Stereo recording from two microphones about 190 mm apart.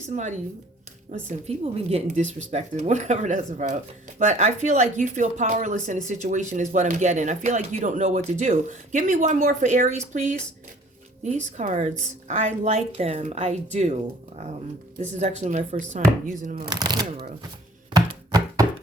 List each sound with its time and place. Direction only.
0.1 s speech: 40° right (ahead or behind)
1.3 s speech: 35° right (ahead or behind)
15.2 s speech: 35° right (ahead or behind)
16.6 s speech: 20° right (ahead or behind)
17.9 s chopping: 20° right (ahead or behind)